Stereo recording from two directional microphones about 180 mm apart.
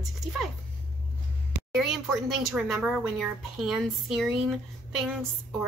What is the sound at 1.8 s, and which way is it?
Speech, centre (ahead or behind).